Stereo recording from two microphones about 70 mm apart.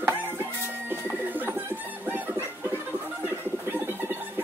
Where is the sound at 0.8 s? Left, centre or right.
Right.